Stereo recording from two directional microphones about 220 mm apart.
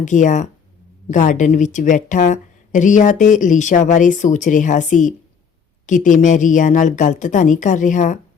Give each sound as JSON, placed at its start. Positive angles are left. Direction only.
{"t": 0.0, "sound": "speech", "side_deg": 35}